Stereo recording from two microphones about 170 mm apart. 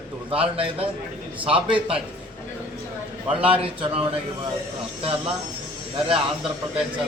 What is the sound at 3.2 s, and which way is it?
Speech, 30° right (ahead or behind).